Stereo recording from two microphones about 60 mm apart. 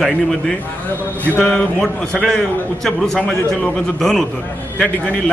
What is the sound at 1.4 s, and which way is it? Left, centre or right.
A man's voice, centre.